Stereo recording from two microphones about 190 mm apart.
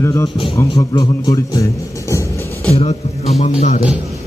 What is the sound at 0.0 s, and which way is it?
A man's voice, 15° left (ahead or behind).